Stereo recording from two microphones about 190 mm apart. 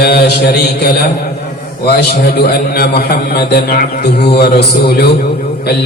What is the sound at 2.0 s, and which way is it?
A man's voice, 60° left (ahead or behind).